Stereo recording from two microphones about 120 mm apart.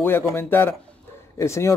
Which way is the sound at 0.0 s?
20° left (ahead or behind).